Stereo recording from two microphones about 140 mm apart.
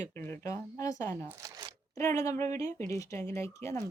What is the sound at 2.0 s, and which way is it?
A woman's voice, 20° left (ahead or behind).